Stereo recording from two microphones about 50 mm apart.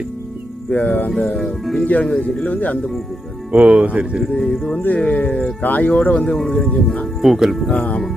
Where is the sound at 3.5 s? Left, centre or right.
Right.